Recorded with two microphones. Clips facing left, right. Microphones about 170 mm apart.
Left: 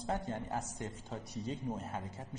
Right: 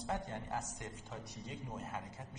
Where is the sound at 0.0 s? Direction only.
35° left (ahead or behind).